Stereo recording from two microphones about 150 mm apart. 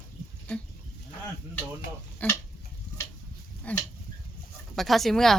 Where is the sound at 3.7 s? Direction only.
10° left (ahead or behind).